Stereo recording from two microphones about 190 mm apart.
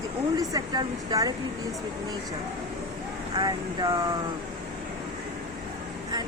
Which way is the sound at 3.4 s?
25° right (ahead or behind).